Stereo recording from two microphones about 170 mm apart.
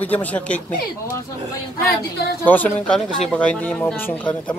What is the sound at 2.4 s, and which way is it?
Speech, 10° left (ahead or behind).